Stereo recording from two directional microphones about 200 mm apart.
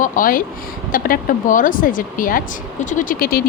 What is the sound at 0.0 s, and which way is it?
Speech, 45° left (ahead or behind).